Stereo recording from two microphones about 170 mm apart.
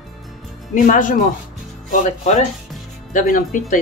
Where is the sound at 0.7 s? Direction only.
50° left (ahead or behind).